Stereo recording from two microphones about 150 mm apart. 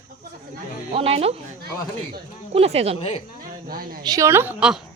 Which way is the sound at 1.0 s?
40° right (ahead or behind).